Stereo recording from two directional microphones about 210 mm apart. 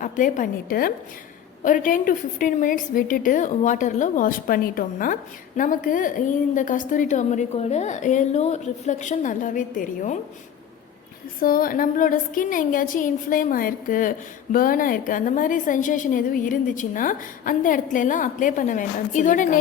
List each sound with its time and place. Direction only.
0.0 s a woman's voice: 40° left (ahead or behind)
11.3 s a woman's voice: 40° left (ahead or behind)